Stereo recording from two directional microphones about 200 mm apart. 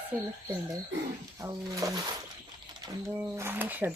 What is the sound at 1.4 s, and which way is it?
Speech, 15° right (ahead or behind).